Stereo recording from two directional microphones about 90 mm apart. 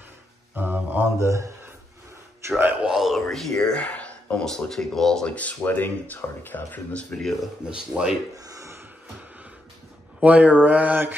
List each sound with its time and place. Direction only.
0.6 s mantra: 20° right (ahead or behind)
1.1 s a man's voice: 35° right (ahead or behind)
2.5 s speech: 20° right (ahead or behind)
2.9 s speech: centre (ahead or behind); by 7.2 s 15° left (ahead or behind)
7.6 s speech: 10° right (ahead or behind)
8.4 s a sound: 40° right (ahead or behind)
10.2 s speech: 15° right (ahead or behind)